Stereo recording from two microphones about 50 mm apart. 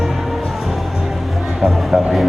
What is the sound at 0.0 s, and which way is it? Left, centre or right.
Music, centre.